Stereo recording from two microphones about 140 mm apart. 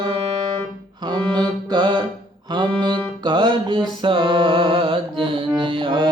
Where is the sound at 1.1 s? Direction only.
30° right (ahead or behind).